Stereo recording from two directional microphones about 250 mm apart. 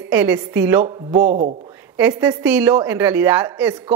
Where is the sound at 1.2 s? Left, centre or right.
Right.